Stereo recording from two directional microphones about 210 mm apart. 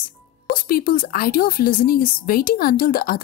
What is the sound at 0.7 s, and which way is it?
A woman's voice, 45° left (ahead or behind).